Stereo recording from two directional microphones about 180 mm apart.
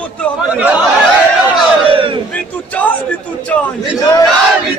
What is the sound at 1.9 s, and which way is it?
Battle cry, 30° right (ahead or behind).